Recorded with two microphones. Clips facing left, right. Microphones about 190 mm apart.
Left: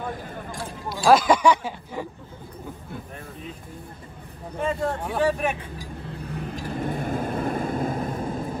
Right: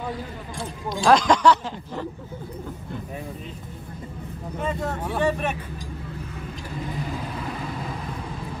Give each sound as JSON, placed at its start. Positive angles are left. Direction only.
{"t": 0.8, "sound": "speech", "side_deg": 5}
{"t": 4.6, "sound": "speech", "side_deg": 10}
{"t": 6.7, "sound": "vehicle", "side_deg": 55}